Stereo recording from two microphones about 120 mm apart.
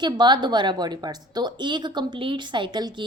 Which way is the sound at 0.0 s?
40° right (ahead or behind).